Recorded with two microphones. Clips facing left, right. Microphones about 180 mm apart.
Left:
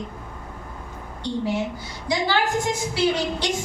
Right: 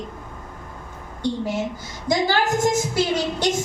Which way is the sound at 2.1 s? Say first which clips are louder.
Right 2 dB; 45° right (ahead or behind).